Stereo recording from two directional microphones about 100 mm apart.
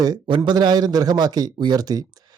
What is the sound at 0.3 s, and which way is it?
A man's voice, 50° right (ahead or behind).